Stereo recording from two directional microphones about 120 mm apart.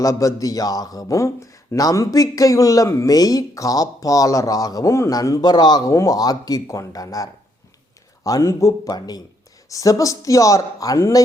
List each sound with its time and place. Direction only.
0.0 s speech: 25° left (ahead or behind)